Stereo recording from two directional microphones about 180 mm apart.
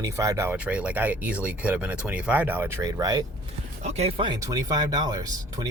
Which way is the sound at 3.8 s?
35° right (ahead or behind).